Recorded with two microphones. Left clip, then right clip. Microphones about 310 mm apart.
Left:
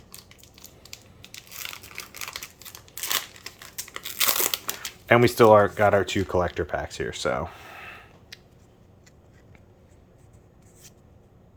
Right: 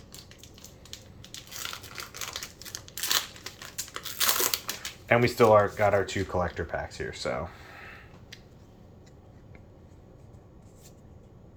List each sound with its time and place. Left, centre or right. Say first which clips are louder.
2.0 s crumpling: left 2 dB; centre
5.0 s speech: left 5 dB; left